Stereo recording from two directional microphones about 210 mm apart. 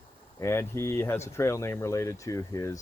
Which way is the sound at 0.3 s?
10° left (ahead or behind).